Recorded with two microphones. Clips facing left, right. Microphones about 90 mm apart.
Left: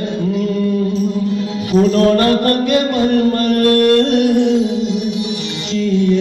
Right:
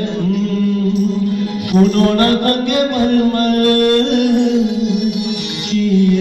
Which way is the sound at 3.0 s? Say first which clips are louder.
Even; 40° left (ahead or behind).